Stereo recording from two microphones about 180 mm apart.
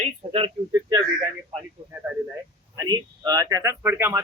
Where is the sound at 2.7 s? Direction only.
25° right (ahead or behind).